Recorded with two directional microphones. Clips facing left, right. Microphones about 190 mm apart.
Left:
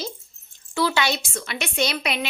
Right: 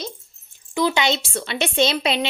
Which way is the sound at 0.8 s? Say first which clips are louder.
Right 3 dB; 20° right (ahead or behind).